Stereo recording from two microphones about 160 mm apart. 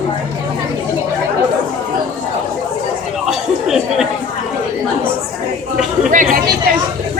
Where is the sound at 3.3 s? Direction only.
Centre (ahead or behind).